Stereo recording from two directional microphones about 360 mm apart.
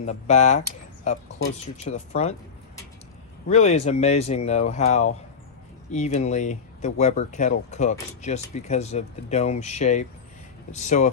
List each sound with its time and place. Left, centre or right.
0.0 s speech: centre
3.5 s speech: centre